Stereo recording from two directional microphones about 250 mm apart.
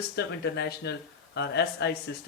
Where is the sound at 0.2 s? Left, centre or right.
Left.